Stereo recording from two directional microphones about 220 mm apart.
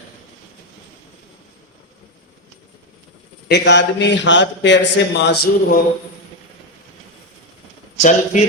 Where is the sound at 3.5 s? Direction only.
50° left (ahead or behind).